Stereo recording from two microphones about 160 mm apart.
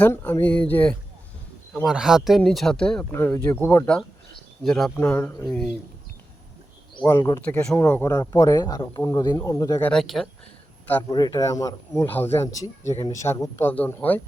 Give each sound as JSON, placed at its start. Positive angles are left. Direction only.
{"t": 0.0, "sound": "speech", "side_deg": 10}
{"t": 4.9, "sound": "speech", "side_deg": 15}
{"t": 7.0, "sound": "speech", "side_deg": 15}
{"t": 9.8, "sound": "speech", "side_deg": 0}
{"t": 11.1, "sound": "speech", "side_deg": 25}